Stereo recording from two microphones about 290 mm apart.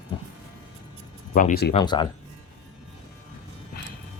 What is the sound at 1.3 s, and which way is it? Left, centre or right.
Speech, left.